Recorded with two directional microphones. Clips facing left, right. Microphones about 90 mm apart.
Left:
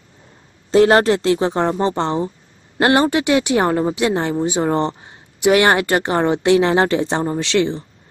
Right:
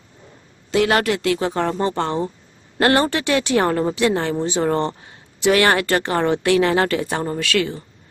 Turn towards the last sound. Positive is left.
turn(degrees=25)  # may be behind; listen again after turning